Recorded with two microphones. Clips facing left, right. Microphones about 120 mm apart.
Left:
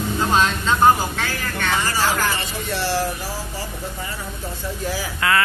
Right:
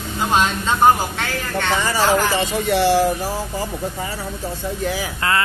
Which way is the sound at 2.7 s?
45° right (ahead or behind).